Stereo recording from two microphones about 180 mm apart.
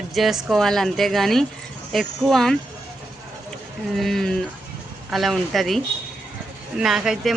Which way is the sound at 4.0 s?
Centre (ahead or behind).